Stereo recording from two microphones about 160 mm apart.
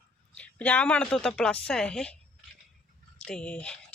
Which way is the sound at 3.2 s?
5° left (ahead or behind).